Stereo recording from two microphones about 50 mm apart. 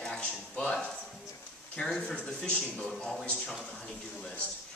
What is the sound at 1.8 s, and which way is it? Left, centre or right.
Speech, centre.